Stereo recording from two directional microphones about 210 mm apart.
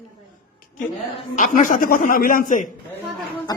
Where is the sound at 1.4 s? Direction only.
35° left (ahead or behind).